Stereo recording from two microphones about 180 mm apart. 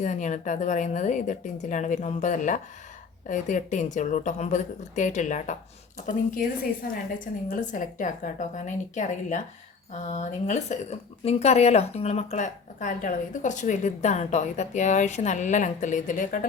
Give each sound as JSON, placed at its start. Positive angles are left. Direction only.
{"t": 0.0, "sound": "a woman's voice", "side_deg": 40}
{"t": 7.4, "sound": "a woman's voice", "side_deg": 50}